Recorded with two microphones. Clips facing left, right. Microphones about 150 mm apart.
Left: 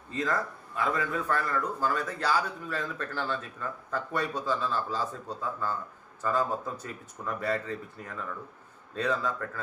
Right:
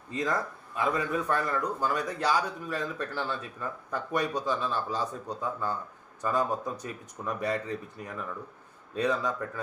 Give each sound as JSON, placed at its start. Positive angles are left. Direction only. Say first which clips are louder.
{"t": 0.1, "sound": "a man's voice", "louder": "even", "side_deg": -15}